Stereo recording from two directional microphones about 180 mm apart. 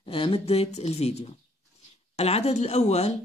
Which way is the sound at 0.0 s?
30° left (ahead or behind).